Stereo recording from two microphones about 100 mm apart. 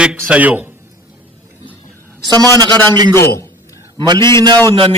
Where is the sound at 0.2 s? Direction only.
15° right (ahead or behind).